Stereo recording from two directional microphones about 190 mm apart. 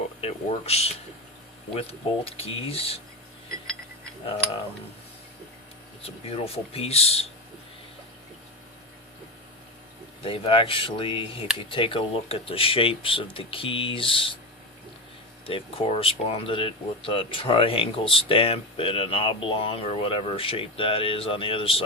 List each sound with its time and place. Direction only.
0.2 s speech: 35° left (ahead or behind)
6.1 s speech: 30° left (ahead or behind)
10.2 s speech: 30° left (ahead or behind)
15.4 s speech: 30° left (ahead or behind)